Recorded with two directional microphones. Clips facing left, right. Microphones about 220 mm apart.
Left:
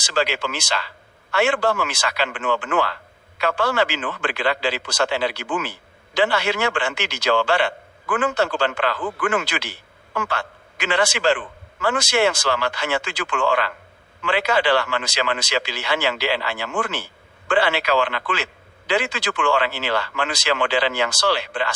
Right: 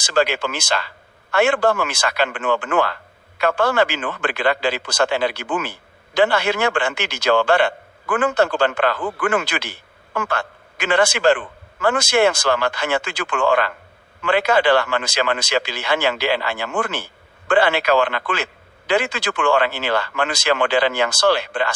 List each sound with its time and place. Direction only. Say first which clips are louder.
0.0 s speech: right 4 dB; 55° right (ahead or behind)